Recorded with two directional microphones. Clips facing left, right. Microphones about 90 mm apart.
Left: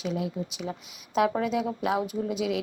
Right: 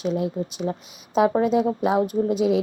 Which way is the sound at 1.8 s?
40° right (ahead or behind).